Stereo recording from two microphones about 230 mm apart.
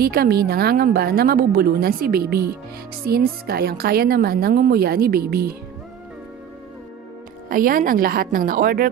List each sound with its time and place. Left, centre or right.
0.0 s a woman's voice: right
7.4 s a woman's voice: right